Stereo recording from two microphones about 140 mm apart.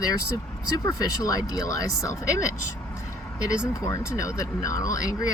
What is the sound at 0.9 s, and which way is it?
Speech, 25° left (ahead or behind).